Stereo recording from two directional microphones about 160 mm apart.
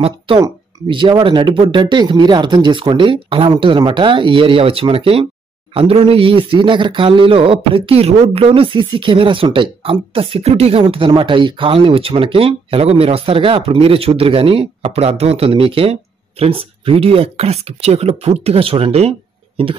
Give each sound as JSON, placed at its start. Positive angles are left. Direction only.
{"t": 0.8, "sound": "a man's voice", "side_deg": -30}